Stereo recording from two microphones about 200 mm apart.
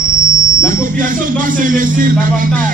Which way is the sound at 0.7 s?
40° right (ahead or behind).